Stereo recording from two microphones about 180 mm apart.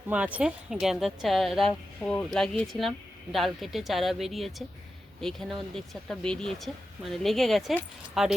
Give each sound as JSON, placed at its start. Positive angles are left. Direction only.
{"t": 0.1, "sound": "speech", "side_deg": -10}